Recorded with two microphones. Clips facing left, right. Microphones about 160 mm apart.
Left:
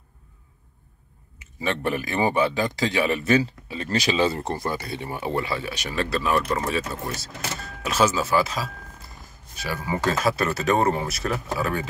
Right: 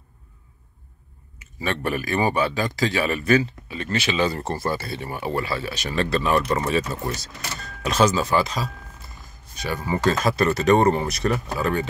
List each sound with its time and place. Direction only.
1.4 s speech: 20° left (ahead or behind)
4.5 s speech: 15° left (ahead or behind)